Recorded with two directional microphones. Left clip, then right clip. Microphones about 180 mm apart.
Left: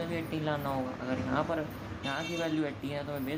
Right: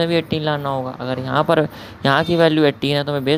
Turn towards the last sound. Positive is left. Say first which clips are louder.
# right 17 dB
turn(degrees=-55)  # may be behind; listen again after turning